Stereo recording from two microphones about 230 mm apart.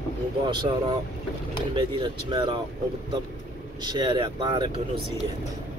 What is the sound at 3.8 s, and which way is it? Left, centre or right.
Speech, centre.